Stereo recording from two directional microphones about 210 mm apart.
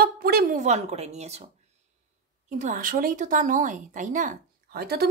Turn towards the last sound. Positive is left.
turn(degrees=-50)  # may be behind; listen again after turning